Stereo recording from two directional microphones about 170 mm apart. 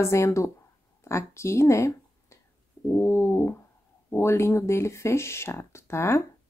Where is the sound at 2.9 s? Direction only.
15° left (ahead or behind).